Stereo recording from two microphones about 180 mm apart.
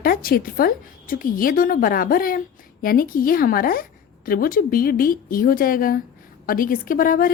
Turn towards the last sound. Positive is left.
turn(degrees=50)  # may be behind; listen again after turning